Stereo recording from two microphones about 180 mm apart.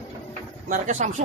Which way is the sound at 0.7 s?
45° right (ahead or behind).